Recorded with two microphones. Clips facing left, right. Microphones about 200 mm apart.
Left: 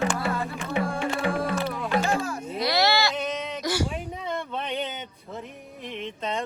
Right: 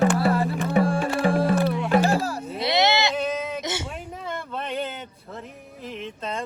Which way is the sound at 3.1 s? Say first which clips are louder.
Right 3 dB; 5° right (ahead or behind).